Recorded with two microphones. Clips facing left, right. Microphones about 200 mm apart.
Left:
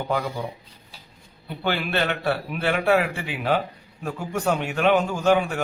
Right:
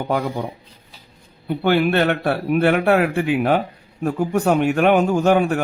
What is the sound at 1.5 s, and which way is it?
A man's voice, 50° right (ahead or behind).